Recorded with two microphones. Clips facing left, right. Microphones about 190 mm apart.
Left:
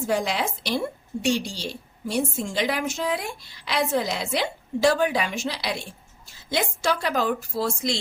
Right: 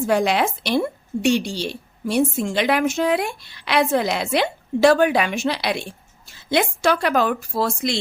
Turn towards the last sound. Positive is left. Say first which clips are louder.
# right 3 dB
turn(degrees=-65)  # may be behind; listen again after turning